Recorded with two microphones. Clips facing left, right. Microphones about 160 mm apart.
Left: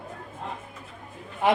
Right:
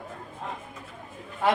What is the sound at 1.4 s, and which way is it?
Speech, 15° left (ahead or behind).